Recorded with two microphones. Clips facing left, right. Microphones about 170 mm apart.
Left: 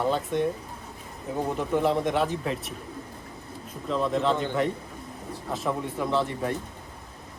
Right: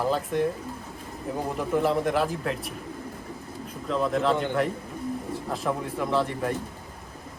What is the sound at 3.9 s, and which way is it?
Speech, centre (ahead or behind).